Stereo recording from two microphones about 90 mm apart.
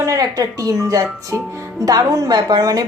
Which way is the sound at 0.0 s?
40° right (ahead or behind).